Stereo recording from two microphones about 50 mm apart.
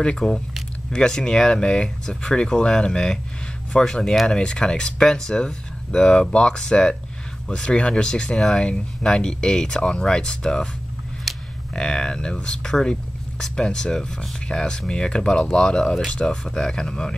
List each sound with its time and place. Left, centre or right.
0.0 s speech: centre
11.3 s a sound: centre
11.7 s speech: centre